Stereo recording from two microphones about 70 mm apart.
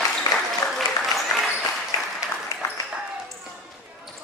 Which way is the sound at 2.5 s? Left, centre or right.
Left.